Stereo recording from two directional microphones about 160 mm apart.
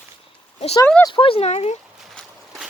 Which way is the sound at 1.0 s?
30° left (ahead or behind).